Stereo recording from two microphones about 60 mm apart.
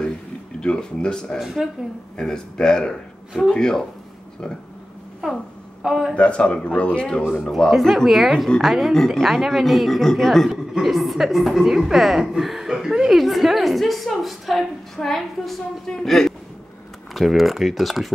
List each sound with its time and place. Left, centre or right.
0.6 s speech: centre
1.4 s speech: centre
2.1 s speech: centre
5.8 s a man's voice: centre
6.1 s speech: centre
7.7 s a woman's voice: centre